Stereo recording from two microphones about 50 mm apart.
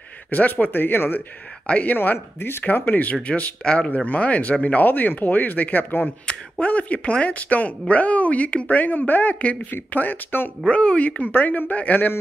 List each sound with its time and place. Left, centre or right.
0.3 s speech: left
1.7 s speech: left
6.6 s speech: left
9.9 s speech: left
10.7 s speech: left
11.1 s speech: left